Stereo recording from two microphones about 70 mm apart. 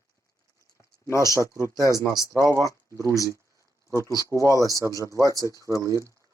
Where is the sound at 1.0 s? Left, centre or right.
Left.